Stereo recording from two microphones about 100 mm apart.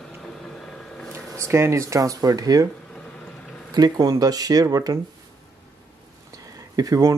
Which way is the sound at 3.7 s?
40° right (ahead or behind).